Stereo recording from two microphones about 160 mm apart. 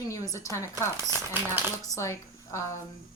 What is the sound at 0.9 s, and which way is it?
Speech, 15° right (ahead or behind).